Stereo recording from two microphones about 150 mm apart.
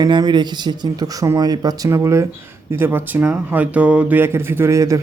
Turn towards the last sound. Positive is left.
turn(degrees=-20)  # may be behind; listen again after turning